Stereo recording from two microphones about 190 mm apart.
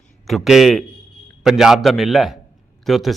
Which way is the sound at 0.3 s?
Centre (ahead or behind).